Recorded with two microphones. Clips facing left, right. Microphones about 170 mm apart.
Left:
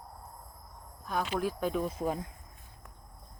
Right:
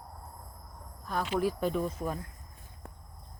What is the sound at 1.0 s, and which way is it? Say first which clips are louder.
Speech: right 2 dB; centre (ahead or behind).